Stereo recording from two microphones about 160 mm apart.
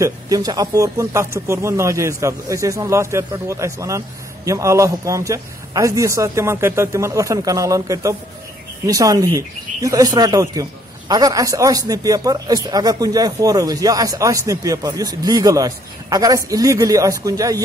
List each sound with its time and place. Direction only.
0.0 s speech: 25° right (ahead or behind)